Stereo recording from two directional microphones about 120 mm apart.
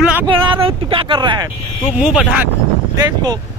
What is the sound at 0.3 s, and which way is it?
Speech, 45° right (ahead or behind).